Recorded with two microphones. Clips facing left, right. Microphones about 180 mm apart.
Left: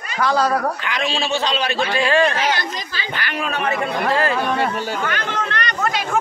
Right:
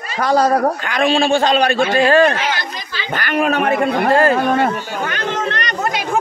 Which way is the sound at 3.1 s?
55° right (ahead or behind).